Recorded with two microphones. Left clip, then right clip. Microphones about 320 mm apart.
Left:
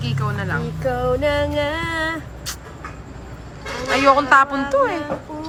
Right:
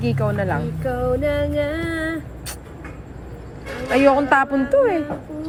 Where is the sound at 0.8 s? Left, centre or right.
Left.